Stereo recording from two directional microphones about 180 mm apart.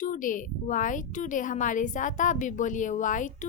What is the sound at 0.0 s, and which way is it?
Child singing, 45° left (ahead or behind).